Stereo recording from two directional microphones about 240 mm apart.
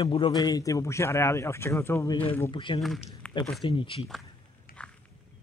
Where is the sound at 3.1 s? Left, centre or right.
Centre.